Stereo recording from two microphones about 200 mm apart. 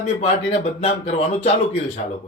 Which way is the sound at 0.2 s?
30° left (ahead or behind).